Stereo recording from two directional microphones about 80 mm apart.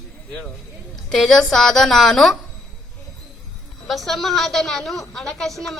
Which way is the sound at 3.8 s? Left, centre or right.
Centre.